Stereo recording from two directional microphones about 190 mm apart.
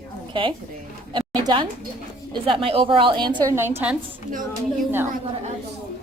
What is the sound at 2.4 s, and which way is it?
A woman's voice, 30° right (ahead or behind).